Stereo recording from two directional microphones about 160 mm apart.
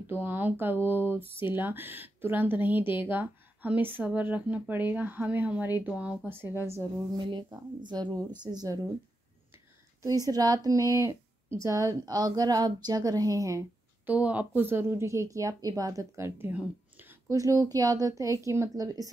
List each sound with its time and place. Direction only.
0.2 s speech: 10° right (ahead or behind)
7.2 s speech: 30° right (ahead or behind)
10.0 s speech: 25° right (ahead or behind)
14.0 s speech: 10° right (ahead or behind)